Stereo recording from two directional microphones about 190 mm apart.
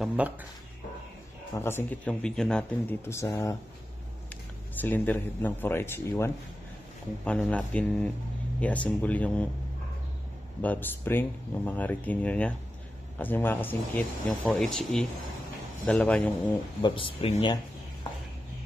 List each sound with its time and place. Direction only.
0.0 s speech: 5° right (ahead or behind)
1.5 s speech: 15° left (ahead or behind)
10.6 s speech: 10° left (ahead or behind)
16.8 s speech: 25° left (ahead or behind)